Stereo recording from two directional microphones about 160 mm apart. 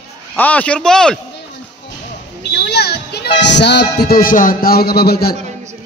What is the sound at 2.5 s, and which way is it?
Speech, 90° left.